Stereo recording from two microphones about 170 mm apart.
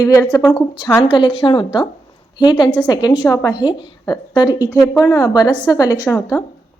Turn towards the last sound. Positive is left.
turn(degrees=15)  # may be behind; listen again after turning